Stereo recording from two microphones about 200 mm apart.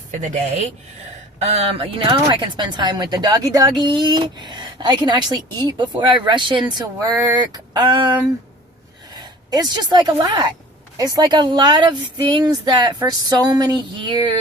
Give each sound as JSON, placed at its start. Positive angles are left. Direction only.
{"t": 0.1, "sound": "speech", "side_deg": -35}
{"t": 9.5, "sound": "speech", "side_deg": -20}